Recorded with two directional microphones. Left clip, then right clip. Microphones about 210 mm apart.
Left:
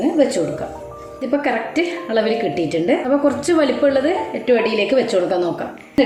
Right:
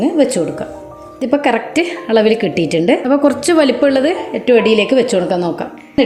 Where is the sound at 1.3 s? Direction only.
45° right (ahead or behind).